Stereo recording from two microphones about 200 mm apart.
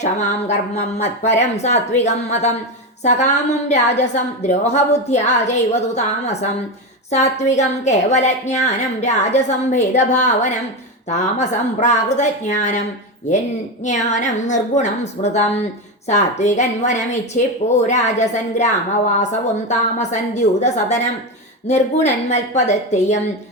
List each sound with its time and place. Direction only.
0.0 s a woman's voice: 35° left (ahead or behind)
13.8 s a woman's voice: 35° left (ahead or behind)